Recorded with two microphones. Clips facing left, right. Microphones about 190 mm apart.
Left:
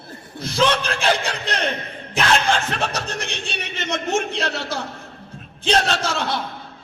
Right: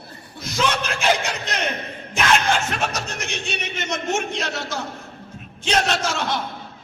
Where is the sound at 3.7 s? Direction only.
35° left (ahead or behind).